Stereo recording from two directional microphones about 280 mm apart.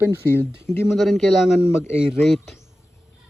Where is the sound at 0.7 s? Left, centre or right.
Centre.